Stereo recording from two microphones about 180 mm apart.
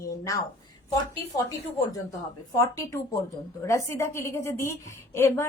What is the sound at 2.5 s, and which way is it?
A woman's voice, 15° left (ahead or behind).